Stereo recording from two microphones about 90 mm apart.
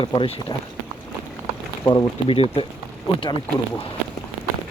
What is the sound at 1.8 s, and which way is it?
Speech, 40° left (ahead or behind).